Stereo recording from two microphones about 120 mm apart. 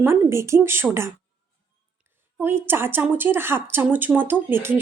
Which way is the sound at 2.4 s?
20° right (ahead or behind).